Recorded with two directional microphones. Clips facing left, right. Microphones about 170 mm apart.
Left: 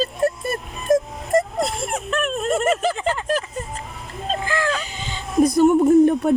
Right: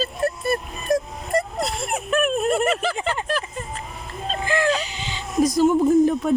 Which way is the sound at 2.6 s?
45° left (ahead or behind).